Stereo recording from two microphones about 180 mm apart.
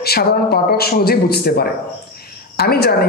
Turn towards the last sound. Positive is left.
turn(degrees=60)  # may be behind; listen again after turning